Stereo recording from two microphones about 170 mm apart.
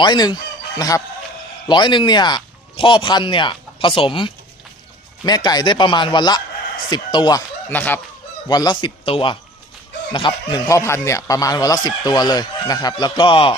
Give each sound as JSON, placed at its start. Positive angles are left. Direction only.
{"t": 0.0, "sound": "speech", "side_deg": 25}
{"t": 7.7, "sound": "speech", "side_deg": 10}
{"t": 8.4, "sound": "speech", "side_deg": 25}
{"t": 10.7, "sound": "speech", "side_deg": 15}